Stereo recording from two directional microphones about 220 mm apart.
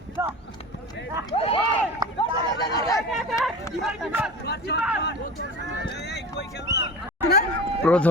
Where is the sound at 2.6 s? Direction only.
15° left (ahead or behind).